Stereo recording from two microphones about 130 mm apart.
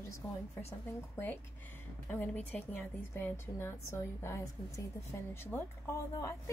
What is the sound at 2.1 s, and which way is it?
A woman's voice, 15° left (ahead or behind).